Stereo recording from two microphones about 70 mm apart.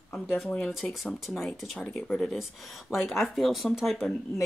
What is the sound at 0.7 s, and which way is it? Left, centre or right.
Speech, centre.